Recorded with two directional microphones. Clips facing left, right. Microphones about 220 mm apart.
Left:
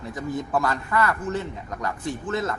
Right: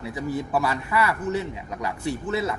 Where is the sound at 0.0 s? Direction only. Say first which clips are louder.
Right 1 dB; 10° right (ahead or behind).